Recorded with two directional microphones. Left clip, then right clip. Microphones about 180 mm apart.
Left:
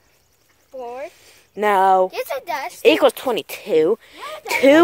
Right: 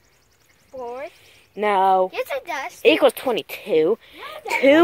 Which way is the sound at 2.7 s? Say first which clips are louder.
Left 1 dB; 25° left (ahead or behind).